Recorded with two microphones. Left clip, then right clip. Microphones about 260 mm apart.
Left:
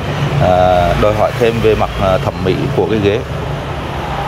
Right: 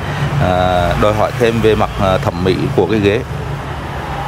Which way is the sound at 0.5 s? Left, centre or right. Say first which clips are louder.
Left 4 dB; centre.